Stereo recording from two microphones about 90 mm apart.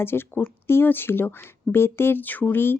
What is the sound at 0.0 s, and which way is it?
A woman's voice, 25° left (ahead or behind).